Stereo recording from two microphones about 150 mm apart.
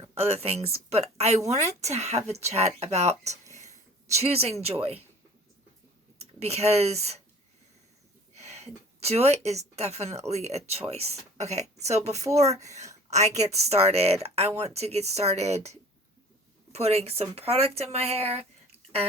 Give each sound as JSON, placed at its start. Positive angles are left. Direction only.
{"t": 0.1, "sound": "speech", "side_deg": -45}
{"t": 3.5, "sound": "whispering", "side_deg": -50}
{"t": 4.2, "sound": "speech", "side_deg": -45}
{"t": 6.4, "sound": "speech", "side_deg": -45}
{"t": 8.4, "sound": "speech", "side_deg": -45}